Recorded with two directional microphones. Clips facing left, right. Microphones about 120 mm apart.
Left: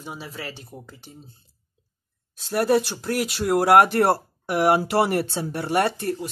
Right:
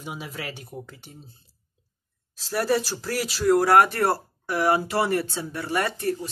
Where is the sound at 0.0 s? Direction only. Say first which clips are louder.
Even; 5° right (ahead or behind).